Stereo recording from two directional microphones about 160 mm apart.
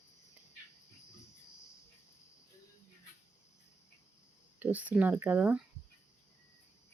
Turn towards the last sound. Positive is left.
turn(degrees=-10)  # may be behind; listen again after turning